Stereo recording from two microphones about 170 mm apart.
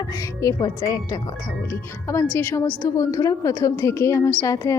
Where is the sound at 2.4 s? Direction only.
15° left (ahead or behind).